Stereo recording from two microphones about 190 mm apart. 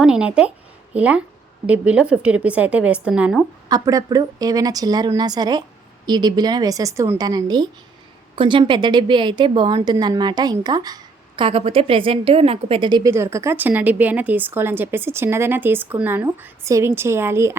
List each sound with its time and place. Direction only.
0.0 s a woman's voice: 5° right (ahead or behind)
3.7 s a woman's voice: 20° right (ahead or behind)